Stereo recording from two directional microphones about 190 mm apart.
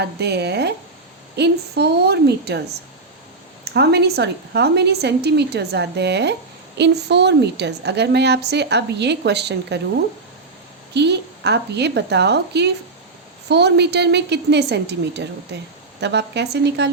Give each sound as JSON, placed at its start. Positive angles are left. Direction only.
{"t": 0.0, "sound": "a woman's voice", "side_deg": -60}
{"t": 3.6, "sound": "a woman's voice", "side_deg": -60}
{"t": 10.9, "sound": "a woman's voice", "side_deg": -60}